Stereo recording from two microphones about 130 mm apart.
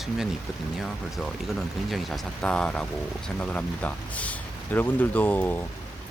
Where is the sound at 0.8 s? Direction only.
Centre (ahead or behind).